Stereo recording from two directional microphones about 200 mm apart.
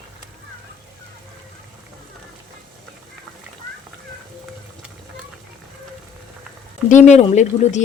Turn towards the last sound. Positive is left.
turn(degrees=35)  # may be behind; listen again after turning